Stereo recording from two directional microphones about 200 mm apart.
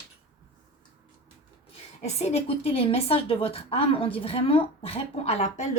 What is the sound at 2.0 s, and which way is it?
A woman's voice, 30° left (ahead or behind).